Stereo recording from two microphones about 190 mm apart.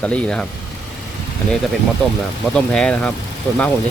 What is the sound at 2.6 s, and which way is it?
Speech, 5° left (ahead or behind).